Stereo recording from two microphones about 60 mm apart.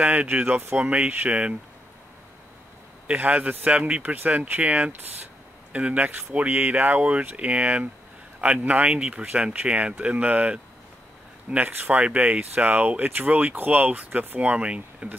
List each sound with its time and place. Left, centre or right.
0.1 s speech: right
3.2 s speech: right